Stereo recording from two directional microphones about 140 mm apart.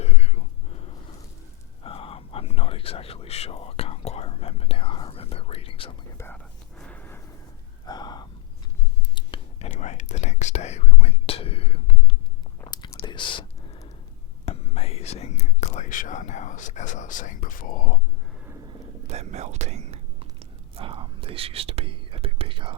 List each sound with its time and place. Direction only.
0.0 s whispering: 50° left (ahead or behind)
1.8 s whispering: 40° left (ahead or behind)
6.1 s whispering: 15° left (ahead or behind)
6.4 s a sound: 5° left (ahead or behind)
7.9 s gasp: 30° left (ahead or behind)
9.1 s whispering: 40° left (ahead or behind)
9.7 s whispering: 60° left (ahead or behind); by 11.9 s 45° left (ahead or behind)
12.6 s whispering: 30° left (ahead or behind)
14.4 s whispering: 45° left (ahead or behind); by 17.9 s 80° left
19.0 s whispering: 55° right (ahead or behind)